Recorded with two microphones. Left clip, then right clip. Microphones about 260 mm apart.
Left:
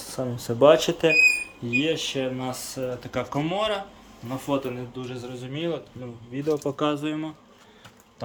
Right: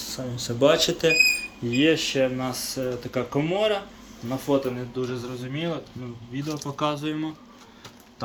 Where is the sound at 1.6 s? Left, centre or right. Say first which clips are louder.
Right 4 dB; centre.